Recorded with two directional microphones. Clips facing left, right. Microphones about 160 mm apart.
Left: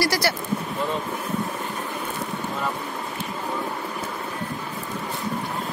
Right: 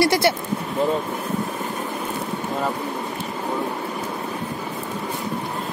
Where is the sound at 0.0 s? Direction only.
25° right (ahead or behind).